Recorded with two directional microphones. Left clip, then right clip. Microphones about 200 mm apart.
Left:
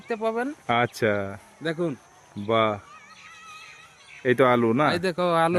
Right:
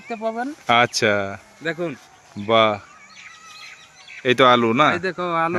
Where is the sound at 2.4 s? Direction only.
5° right (ahead or behind).